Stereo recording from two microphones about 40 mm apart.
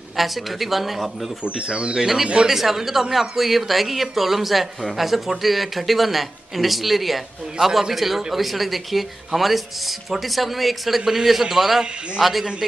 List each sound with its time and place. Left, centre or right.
0.2 s speech: centre
1.4 s speech: right
2.0 s a man's voice: centre
7.6 s speech: right
7.9 s a man's voice: centre